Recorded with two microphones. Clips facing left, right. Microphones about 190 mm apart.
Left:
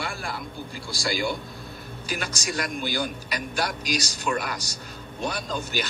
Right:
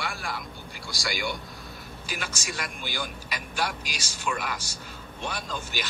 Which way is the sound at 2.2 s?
35° left (ahead or behind).